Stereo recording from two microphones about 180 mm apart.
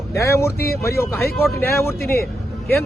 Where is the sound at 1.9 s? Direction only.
60° left (ahead or behind).